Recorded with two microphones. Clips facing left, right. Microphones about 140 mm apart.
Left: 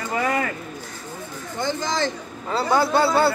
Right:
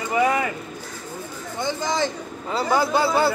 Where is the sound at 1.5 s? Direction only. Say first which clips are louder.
Even; 15° right (ahead or behind).